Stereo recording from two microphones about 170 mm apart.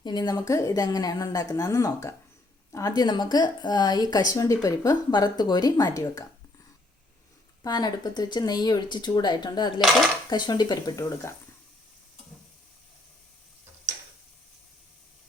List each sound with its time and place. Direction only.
0.0 s speech: 25° left (ahead or behind)
7.6 s speech: 25° left (ahead or behind)